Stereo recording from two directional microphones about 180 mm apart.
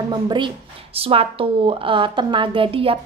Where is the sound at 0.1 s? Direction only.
25° right (ahead or behind).